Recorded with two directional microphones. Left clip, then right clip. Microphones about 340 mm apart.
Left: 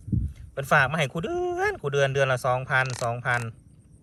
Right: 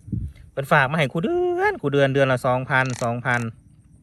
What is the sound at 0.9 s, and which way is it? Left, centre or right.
Speech, centre.